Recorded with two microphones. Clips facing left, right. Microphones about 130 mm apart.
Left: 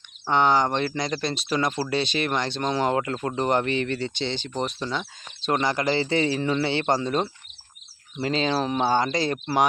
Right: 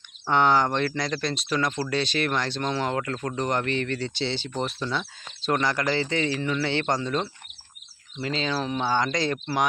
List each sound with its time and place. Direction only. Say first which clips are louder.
0.4 s speech: even; 15° left (ahead or behind)
1.2 s speech: left 1 dB; centre (ahead or behind)
1.5 s speech: left 2 dB; 25° left (ahead or behind)
3.7 s speech: left 2 dB; 10° left (ahead or behind)
4.0 s speech: even; 5° right (ahead or behind)
4.8 s speech: even; 10° left (ahead or behind)
5.5 s speech: left 1 dB; 20° left (ahead or behind)
8.5 s speech: left 1 dB; 40° left (ahead or behind)